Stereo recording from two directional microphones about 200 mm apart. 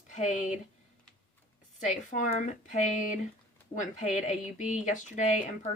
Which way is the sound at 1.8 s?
35° left (ahead or behind).